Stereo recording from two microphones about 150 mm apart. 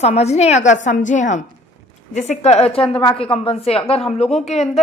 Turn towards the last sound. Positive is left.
turn(degrees=45)  # may be behind; listen again after turning